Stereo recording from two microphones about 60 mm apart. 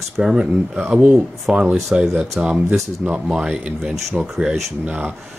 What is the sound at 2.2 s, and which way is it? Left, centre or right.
Speech, centre.